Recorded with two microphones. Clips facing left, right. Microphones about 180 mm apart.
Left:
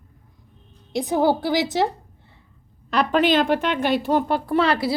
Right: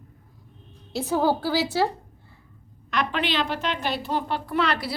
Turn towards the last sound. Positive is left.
turn(degrees=30)  # may be behind; listen again after turning